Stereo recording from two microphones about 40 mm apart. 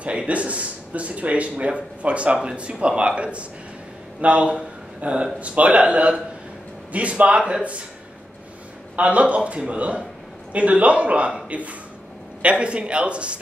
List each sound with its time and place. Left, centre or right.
0.0 s a man's voice: right
8.9 s a man's voice: right